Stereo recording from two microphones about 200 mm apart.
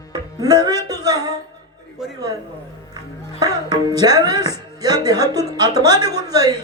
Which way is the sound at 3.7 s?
20° right (ahead or behind).